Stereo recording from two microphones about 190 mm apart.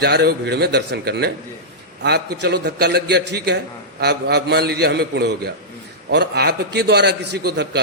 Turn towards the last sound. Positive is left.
turn(degrees=-60)  # may be behind; listen again after turning